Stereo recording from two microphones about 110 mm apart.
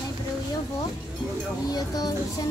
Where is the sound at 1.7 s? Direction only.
35° left (ahead or behind).